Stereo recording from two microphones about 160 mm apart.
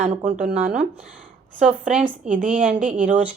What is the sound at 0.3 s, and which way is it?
Speech, 50° right (ahead or behind).